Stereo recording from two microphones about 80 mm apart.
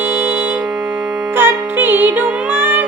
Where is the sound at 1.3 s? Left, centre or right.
Right.